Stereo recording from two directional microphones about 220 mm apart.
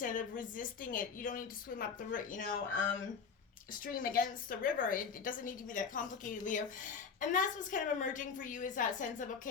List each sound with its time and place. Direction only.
0.0 s a woman's voice: 35° left (ahead or behind)